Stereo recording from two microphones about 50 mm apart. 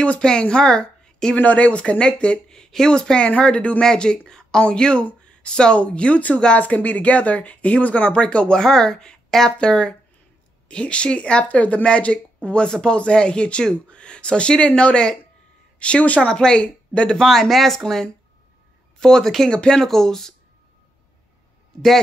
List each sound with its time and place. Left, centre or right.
0.0 s a woman's voice: left
16.2 s speech: centre
17.2 s speech: centre